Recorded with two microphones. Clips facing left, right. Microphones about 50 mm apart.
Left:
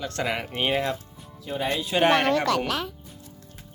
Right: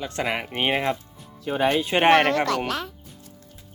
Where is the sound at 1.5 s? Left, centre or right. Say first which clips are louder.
Right 6 dB; right.